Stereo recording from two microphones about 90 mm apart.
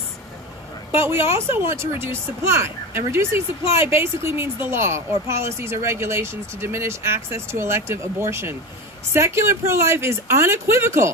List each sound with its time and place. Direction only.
0.9 s speech: 30° right (ahead or behind)